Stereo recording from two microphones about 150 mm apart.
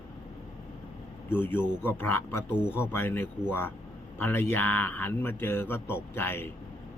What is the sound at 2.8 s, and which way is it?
A man's voice, 15° left (ahead or behind).